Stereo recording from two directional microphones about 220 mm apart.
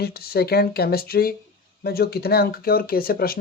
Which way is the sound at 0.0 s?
45° left (ahead or behind).